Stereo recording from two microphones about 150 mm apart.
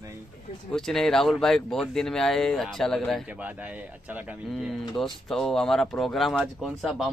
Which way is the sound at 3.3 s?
10° right (ahead or behind).